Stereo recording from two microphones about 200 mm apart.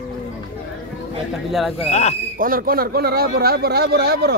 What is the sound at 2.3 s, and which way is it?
A man's voice, 45° right (ahead or behind).